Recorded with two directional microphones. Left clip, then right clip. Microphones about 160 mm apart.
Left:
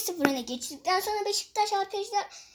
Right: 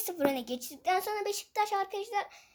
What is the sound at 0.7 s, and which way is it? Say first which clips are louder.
A woman's voice: left 3 dB; centre (ahead or behind).